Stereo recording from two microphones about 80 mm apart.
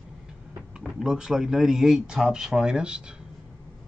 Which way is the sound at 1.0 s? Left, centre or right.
Centre.